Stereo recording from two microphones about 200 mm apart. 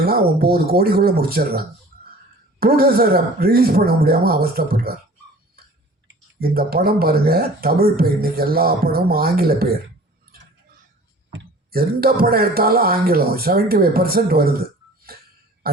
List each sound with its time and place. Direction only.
0.0 s speech: 50° right (ahead or behind)
6.1 s speech: 50° right (ahead or behind)
11.3 s speech: 50° right (ahead or behind)